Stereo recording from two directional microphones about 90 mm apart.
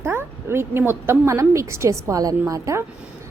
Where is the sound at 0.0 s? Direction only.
30° right (ahead or behind).